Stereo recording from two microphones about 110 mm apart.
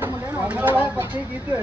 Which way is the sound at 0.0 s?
15° right (ahead or behind).